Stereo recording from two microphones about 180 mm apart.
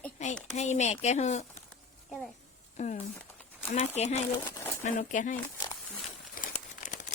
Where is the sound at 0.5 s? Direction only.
40° left (ahead or behind).